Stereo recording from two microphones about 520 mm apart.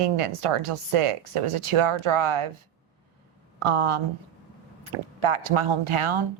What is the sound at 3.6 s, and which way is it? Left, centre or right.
A woman's voice, right.